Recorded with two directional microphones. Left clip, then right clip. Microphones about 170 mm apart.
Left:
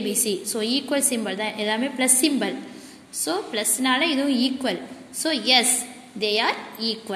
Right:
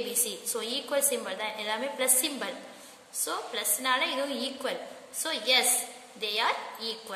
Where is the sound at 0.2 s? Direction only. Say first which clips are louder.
Left 8 dB; 15° left (ahead or behind).